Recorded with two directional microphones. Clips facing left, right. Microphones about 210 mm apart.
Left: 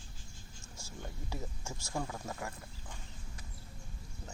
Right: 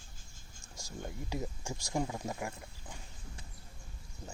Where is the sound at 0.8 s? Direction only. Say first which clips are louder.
Right 4 dB; 15° right (ahead or behind).